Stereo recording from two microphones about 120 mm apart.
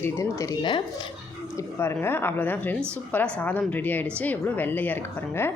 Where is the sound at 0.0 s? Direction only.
25° left (ahead or behind).